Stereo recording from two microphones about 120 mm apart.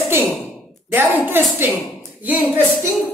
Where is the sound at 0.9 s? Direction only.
20° right (ahead or behind).